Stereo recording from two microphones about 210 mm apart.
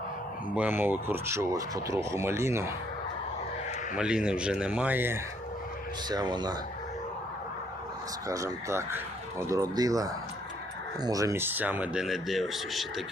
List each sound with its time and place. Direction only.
0.5 s speech: 5° right (ahead or behind)
3.9 s speech: 5° right (ahead or behind); by 6.5 s 20° right (ahead or behind)
8.3 s speech: 15° right (ahead or behind); by 12.8 s centre (ahead or behind)